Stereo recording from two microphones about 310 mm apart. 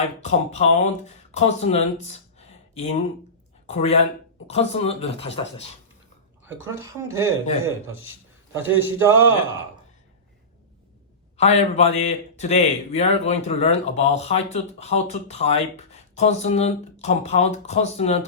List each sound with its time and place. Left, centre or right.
0.2 s a man's voice: left
6.6 s speech: centre
8.5 s speech: centre
11.3 s a man's voice: left